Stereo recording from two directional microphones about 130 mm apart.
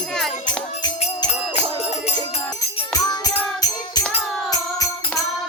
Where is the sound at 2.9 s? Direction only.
30° left (ahead or behind).